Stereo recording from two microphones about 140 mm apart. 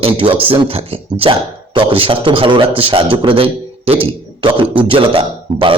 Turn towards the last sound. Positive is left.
turn(degrees=-40)  # may be behind; listen again after turning